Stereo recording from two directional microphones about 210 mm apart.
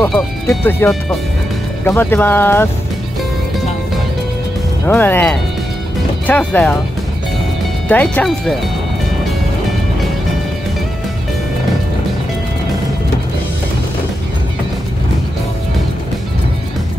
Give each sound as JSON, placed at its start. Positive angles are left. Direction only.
{"t": 0.0, "sound": "speech", "side_deg": 5}
{"t": 4.8, "sound": "speech", "side_deg": 10}
{"t": 7.9, "sound": "speech", "side_deg": 10}